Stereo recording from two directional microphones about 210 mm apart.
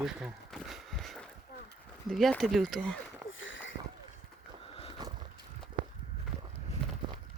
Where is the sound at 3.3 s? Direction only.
65° left (ahead or behind).